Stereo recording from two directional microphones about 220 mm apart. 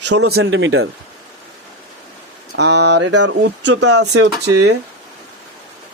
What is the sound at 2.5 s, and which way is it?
Speech, 50° right (ahead or behind).